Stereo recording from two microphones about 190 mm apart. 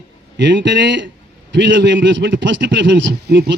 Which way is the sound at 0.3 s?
70° right (ahead or behind).